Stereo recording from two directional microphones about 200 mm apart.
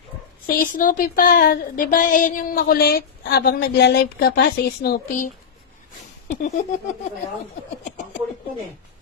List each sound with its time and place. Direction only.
0.4 s speech: 45° left (ahead or behind)